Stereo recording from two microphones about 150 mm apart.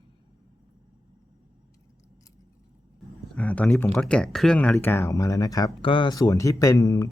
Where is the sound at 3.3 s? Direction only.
10° left (ahead or behind).